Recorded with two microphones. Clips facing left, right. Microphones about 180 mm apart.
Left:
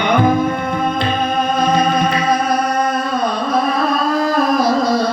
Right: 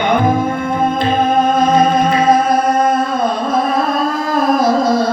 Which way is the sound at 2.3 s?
50° right (ahead or behind).